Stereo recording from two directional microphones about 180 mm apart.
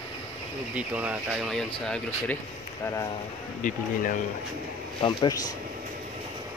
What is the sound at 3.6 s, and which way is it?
Speech, 45° left (ahead or behind).